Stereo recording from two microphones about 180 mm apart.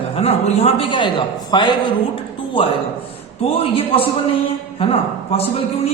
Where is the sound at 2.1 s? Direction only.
30° left (ahead or behind).